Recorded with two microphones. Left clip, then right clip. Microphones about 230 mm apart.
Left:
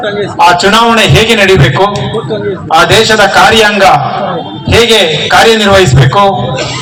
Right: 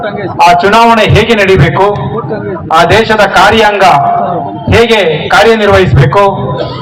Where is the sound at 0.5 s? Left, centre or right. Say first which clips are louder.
Right 1 dB; left.